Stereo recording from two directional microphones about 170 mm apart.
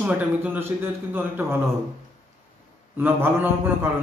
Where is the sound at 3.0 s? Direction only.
10° right (ahead or behind).